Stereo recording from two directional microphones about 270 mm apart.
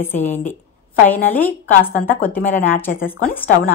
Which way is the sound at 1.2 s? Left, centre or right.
Centre.